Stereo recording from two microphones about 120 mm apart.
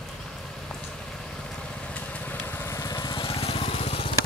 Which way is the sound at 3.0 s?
45° left (ahead or behind).